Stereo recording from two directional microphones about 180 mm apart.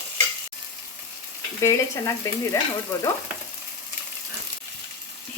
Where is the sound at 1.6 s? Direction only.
15° left (ahead or behind).